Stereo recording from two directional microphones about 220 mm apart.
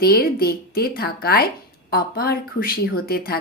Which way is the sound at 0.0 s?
45° left (ahead or behind).